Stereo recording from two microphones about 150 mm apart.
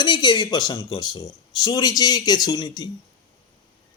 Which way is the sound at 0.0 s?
30° left (ahead or behind).